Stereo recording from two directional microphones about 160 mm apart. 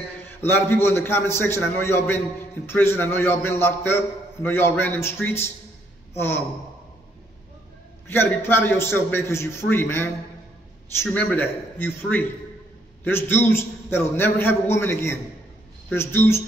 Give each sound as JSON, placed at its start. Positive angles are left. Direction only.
{"t": 0.2, "sound": "a man's voice", "side_deg": 15}
{"t": 8.1, "sound": "a man's voice", "side_deg": 15}